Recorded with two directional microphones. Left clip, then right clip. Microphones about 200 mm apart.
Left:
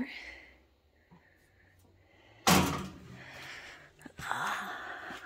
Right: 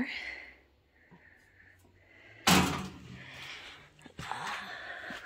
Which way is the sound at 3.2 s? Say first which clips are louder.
Right 1 dB; 15° left (ahead or behind).